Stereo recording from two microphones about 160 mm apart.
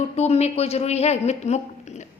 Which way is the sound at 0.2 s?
40° left (ahead or behind).